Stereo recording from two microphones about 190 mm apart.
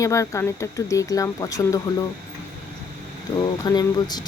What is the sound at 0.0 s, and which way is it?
Speech, 15° left (ahead or behind).